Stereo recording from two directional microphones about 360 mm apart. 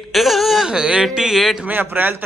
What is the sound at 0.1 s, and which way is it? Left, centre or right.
A man's voice, centre.